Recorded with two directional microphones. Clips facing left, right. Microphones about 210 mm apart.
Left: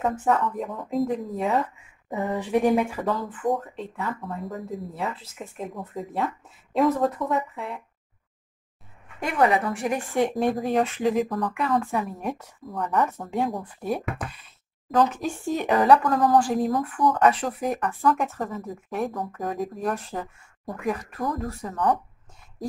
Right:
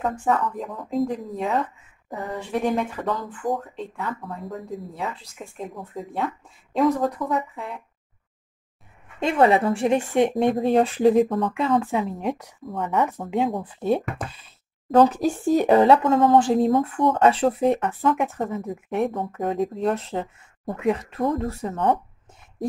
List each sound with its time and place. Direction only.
0.0 s speech: 5° left (ahead or behind)
2.3 s speech: 15° left (ahead or behind)
9.2 s speech: 25° right (ahead or behind)
12.6 s speech: centre (ahead or behind)
13.3 s speech: 25° right (ahead or behind)